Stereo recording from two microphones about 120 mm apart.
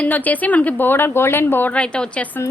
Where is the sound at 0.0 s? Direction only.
15° left (ahead or behind).